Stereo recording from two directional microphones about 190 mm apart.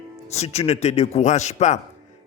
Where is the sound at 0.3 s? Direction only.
35° left (ahead or behind).